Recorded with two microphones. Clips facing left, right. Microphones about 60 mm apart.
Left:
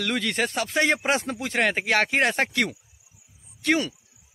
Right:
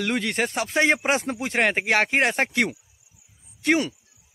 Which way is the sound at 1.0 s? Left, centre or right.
Right.